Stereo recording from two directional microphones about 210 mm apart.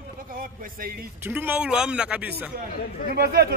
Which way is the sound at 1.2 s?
10° right (ahead or behind).